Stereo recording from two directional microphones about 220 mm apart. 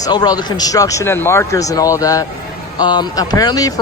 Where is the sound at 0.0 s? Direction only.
20° left (ahead or behind).